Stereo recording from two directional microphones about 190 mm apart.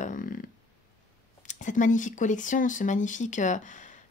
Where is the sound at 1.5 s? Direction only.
40° left (ahead or behind).